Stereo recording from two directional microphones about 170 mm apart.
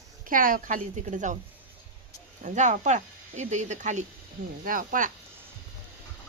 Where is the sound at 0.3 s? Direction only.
55° right (ahead or behind).